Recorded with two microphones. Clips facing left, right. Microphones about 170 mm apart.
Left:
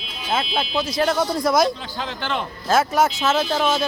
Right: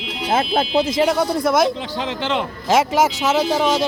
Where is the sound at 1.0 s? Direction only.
10° right (ahead or behind).